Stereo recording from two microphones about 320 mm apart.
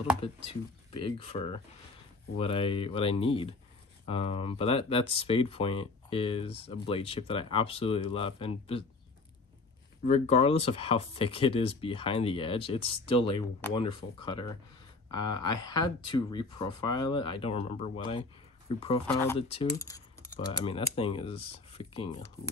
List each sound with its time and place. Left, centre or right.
0.5 s speech: centre
10.0 s speech: left